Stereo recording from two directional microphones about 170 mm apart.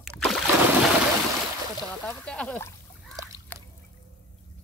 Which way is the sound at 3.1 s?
20° right (ahead or behind).